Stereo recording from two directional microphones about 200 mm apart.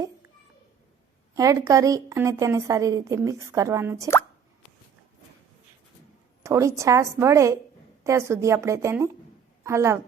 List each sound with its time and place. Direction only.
1.4 s a woman's voice: 15° right (ahead or behind)
6.4 s a woman's voice: 15° right (ahead or behind)